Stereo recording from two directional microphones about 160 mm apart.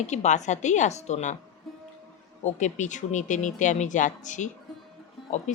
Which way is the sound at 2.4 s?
50° left (ahead or behind).